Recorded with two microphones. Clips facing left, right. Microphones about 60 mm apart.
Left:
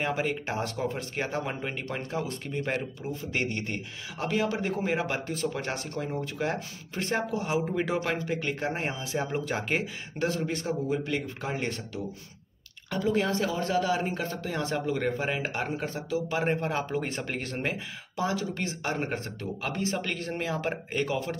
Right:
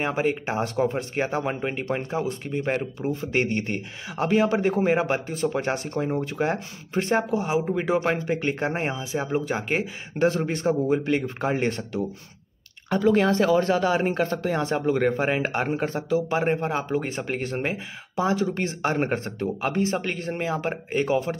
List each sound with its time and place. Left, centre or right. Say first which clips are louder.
0.0 s speech: right 5 dB; right
3.0 s speech: right 7 dB; right; by 8.0 s centre
8.0 s speech: right 5 dB; right
9.1 s speech: right 4 dB; centre
10.1 s speech: right 7 dB; right
12.9 s speech: right 7 dB; right
14.6 s speech: right 5 dB; right
16.5 s speech: right 4 dB; centre